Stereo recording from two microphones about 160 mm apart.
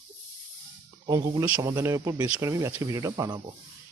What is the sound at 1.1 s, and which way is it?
Speech, 25° right (ahead or behind).